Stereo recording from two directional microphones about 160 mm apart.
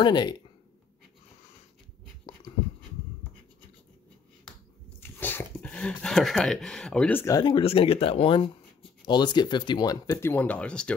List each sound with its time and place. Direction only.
0.0 s speech: 25° left (ahead or behind)
2.3 s writing: 30° left (ahead or behind)
5.2 s speech: 10° left (ahead or behind)
7.4 s speech: 35° left (ahead or behind); by 11.0 s 5° left (ahead or behind)